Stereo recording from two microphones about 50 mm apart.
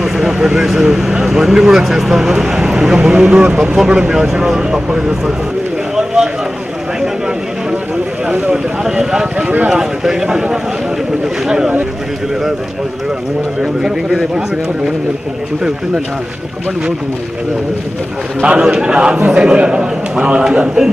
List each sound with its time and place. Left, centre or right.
0.0 s a sound: centre
0.6 s speech: centre
5.9 s a sound: centre
8.3 s a man's voice: right
8.8 s speech: centre
13.6 s speech: centre
18.4 s a man's voice: centre